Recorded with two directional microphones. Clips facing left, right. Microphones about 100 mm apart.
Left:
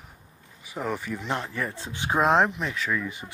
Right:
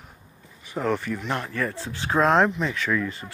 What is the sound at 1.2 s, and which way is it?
Speech, 20° left (ahead or behind).